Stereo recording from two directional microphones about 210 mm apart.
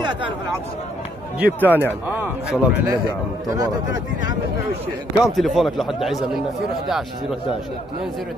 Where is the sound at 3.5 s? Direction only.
20° right (ahead or behind).